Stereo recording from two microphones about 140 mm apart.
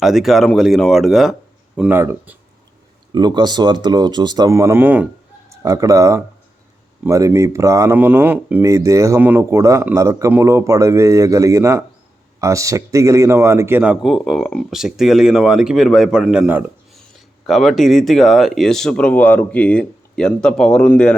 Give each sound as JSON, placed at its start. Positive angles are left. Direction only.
{"t": 0.0, "sound": "speech", "side_deg": 0}
{"t": 3.1, "sound": "speech", "side_deg": -30}
{"t": 5.5, "sound": "a man's voice", "side_deg": -25}
{"t": 16.9, "sound": "speech", "side_deg": 0}